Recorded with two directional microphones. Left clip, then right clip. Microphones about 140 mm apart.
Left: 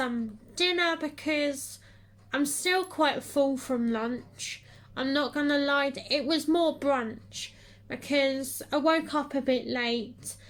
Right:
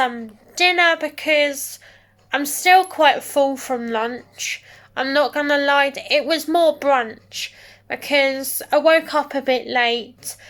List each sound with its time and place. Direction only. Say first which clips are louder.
0.5 s a woman's voice: right 11 dB; 20° left (ahead or behind)